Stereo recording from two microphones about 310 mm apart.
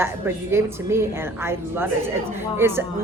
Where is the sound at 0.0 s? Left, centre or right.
Centre.